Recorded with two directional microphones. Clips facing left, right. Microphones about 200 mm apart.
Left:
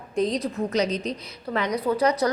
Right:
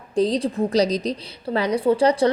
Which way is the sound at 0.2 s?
30° right (ahead or behind).